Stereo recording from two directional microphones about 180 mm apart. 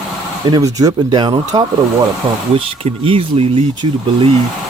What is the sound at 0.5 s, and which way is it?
Speech, 20° right (ahead or behind).